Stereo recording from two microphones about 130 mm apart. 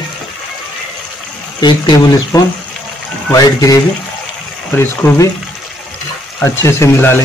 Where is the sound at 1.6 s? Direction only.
35° left (ahead or behind).